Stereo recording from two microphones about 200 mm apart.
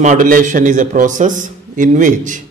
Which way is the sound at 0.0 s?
40° right (ahead or behind).